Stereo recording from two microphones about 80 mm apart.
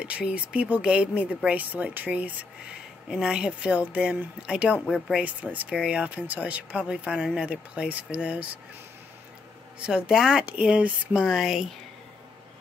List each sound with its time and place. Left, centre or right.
0.0 s speech: centre
4.8 s speech: centre
5.2 s speech: centre
9.8 s speech: centre